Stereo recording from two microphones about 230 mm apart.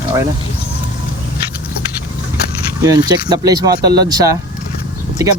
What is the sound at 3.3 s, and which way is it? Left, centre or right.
Speech, centre.